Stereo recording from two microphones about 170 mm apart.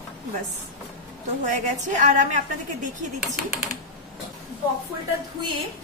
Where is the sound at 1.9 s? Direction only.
45° right (ahead or behind).